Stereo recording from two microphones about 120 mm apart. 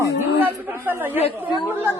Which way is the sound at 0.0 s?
20° right (ahead or behind).